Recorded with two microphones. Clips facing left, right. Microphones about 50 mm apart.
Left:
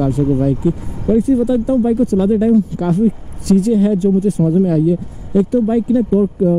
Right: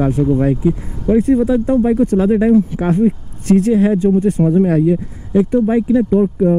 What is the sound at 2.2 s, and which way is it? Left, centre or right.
Speech, right.